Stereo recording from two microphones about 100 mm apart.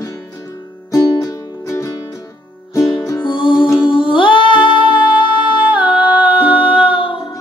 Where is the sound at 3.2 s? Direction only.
55° left (ahead or behind).